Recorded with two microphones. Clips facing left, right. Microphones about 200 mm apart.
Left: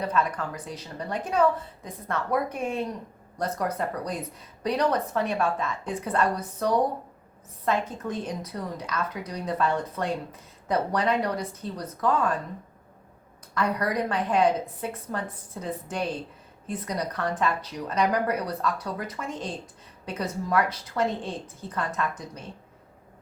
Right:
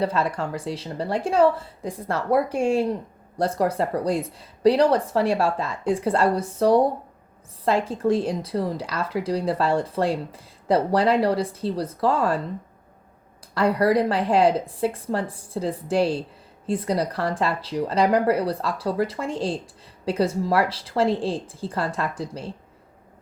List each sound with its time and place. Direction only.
0.0 s a woman's voice: 30° right (ahead or behind)
13.5 s a woman's voice: 30° right (ahead or behind)